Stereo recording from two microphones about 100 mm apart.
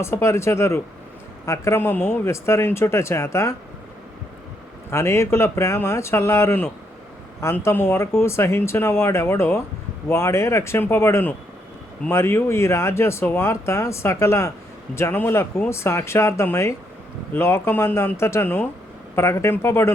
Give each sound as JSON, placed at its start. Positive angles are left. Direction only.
{"t": 0.0, "sound": "speech", "side_deg": 25}
{"t": 4.9, "sound": "speech", "side_deg": 25}